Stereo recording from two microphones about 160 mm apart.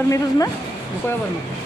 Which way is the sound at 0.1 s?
20° left (ahead or behind).